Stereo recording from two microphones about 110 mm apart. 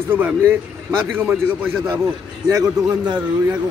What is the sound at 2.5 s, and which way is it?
Speech, 35° right (ahead or behind).